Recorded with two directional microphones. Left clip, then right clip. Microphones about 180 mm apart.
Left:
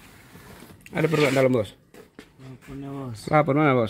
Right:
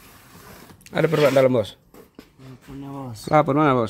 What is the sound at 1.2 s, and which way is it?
Speech, 10° right (ahead or behind).